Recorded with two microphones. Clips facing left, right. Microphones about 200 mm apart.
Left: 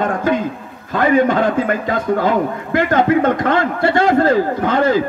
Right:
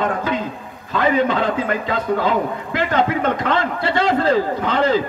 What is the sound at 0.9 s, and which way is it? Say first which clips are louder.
Speech: left 4 dB; 50° left (ahead or behind).